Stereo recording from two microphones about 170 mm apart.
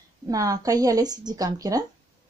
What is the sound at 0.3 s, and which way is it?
Speech, 20° right (ahead or behind).